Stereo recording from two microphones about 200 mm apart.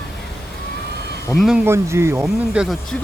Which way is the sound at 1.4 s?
5° right (ahead or behind).